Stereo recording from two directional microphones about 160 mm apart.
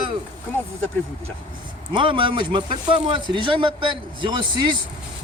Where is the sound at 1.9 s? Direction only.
30° right (ahead or behind).